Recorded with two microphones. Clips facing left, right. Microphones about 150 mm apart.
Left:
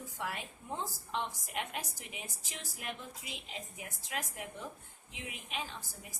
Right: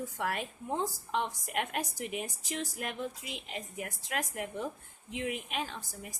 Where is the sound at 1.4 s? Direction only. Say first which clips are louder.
Right 5 dB; 50° right (ahead or behind).